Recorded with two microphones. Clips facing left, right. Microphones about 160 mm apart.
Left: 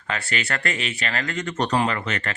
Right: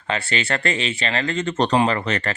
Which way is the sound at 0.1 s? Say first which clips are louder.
Right 4 dB; 25° right (ahead or behind).